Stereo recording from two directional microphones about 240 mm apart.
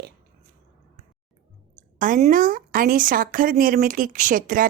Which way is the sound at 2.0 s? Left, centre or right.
Right.